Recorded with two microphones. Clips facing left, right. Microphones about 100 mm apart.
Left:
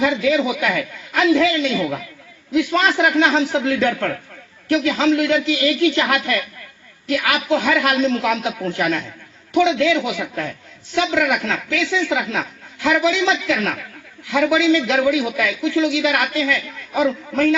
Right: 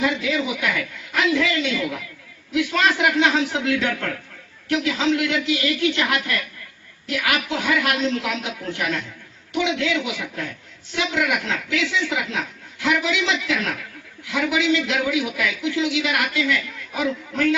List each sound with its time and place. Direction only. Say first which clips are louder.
0.2 s a man's voice: left 6 dB; 40° left (ahead or behind)